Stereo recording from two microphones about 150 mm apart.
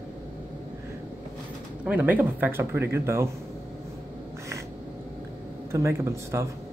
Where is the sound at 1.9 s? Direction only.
10° right (ahead or behind).